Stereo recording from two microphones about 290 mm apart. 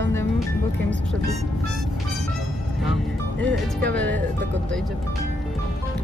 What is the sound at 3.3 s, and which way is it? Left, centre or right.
Speech, centre.